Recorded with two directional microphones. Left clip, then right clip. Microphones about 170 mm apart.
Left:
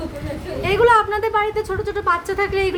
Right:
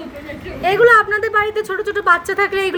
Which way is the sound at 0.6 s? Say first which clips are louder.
Right 4 dB; 5° right (ahead or behind).